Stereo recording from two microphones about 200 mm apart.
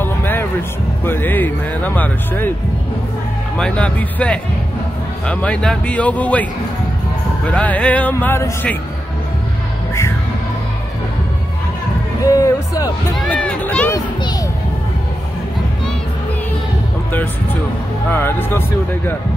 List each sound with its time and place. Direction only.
0.0 s music: 10° left (ahead or behind)
1.0 s speech: 10° left (ahead or behind)
3.5 s speech: 5° left (ahead or behind)
7.4 s speech: 5° left (ahead or behind)
12.4 s music: 15° left (ahead or behind)
13.2 s a sound: 5° left (ahead or behind)
18.1 s speech: 10° left (ahead or behind)